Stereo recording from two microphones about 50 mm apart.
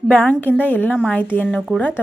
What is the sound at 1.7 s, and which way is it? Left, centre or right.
Speech, centre.